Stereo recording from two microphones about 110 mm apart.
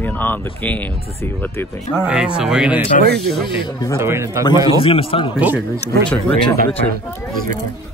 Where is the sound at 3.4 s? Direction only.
45° left (ahead or behind).